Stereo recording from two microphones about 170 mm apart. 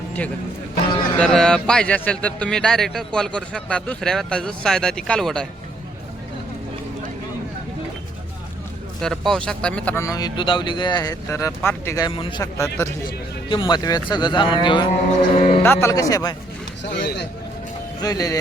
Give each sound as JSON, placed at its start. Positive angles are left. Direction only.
{"t": 1.2, "sound": "a man's voice", "side_deg": 5}
{"t": 9.0, "sound": "a man's voice", "side_deg": 0}
{"t": 12.1, "sound": "speech", "side_deg": 30}
{"t": 12.4, "sound": "a man's voice", "side_deg": 20}
{"t": 15.6, "sound": "a man's voice", "side_deg": 15}
{"t": 16.9, "sound": "speech", "side_deg": 80}
{"t": 18.0, "sound": "a man's voice", "side_deg": 20}